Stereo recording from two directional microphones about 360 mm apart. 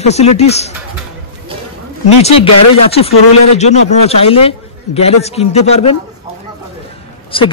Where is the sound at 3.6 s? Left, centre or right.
Centre.